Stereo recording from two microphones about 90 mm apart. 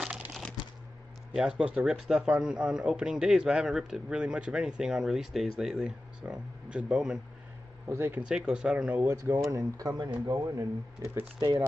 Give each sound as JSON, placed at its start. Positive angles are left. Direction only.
{"t": 0.0, "sound": "a sound", "side_deg": -5}
{"t": 1.6, "sound": "a man's voice", "side_deg": -10}
{"t": 7.9, "sound": "speech", "side_deg": -30}
{"t": 8.3, "sound": "a man's voice", "side_deg": -10}
{"t": 9.1, "sound": "speech", "side_deg": -30}